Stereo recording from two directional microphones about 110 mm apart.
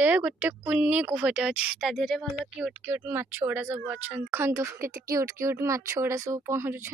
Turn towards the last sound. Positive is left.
turn(degrees=-20)  # may be behind; listen again after turning